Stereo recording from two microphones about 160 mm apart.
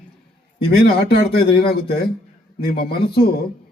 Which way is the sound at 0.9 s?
80° left.